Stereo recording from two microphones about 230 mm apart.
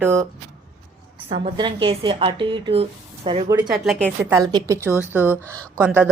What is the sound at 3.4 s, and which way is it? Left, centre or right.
Speech, centre.